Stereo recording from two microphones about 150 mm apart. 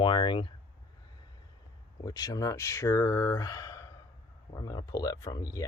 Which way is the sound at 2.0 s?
25° left (ahead or behind).